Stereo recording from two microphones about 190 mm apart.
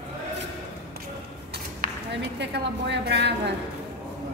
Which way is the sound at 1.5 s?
60° right (ahead or behind).